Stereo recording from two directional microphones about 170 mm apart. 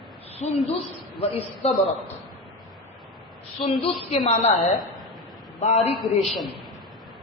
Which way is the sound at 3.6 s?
35° left (ahead or behind).